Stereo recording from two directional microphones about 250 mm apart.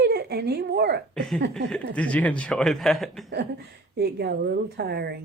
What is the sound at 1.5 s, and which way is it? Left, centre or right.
Speech, centre.